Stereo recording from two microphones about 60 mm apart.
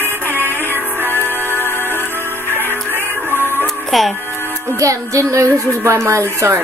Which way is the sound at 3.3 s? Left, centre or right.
Left.